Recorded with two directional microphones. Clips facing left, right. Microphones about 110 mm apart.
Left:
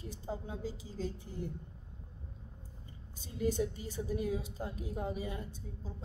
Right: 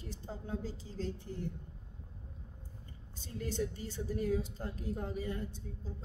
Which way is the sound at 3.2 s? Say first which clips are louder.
Left 4 dB; 10° left (ahead or behind).